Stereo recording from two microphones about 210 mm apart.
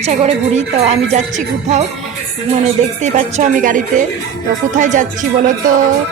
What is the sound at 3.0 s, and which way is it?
Speech, 35° right (ahead or behind).